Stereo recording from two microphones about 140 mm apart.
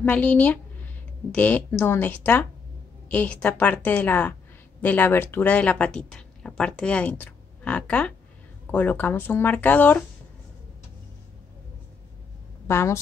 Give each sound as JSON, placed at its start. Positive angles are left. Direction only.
{"t": 0.0, "sound": "speech", "side_deg": 10}
{"t": 12.6, "sound": "a woman's voice", "side_deg": 20}